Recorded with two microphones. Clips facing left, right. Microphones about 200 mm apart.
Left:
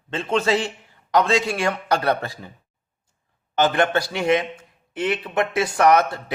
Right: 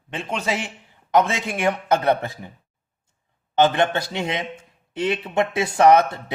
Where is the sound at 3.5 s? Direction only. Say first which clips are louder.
Right 1 dB; 25° right (ahead or behind).